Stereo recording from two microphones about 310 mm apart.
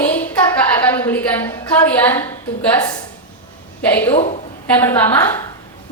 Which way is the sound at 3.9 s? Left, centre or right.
Centre.